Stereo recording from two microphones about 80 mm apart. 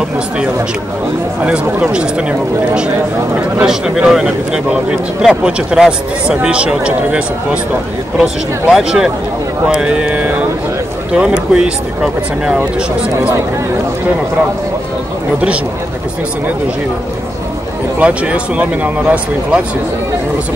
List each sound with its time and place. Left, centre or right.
1.4 s speech: centre
3.6 s speech: centre
17.9 s speech: centre